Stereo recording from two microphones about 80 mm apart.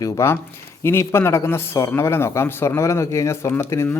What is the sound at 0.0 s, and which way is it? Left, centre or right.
Speech, left.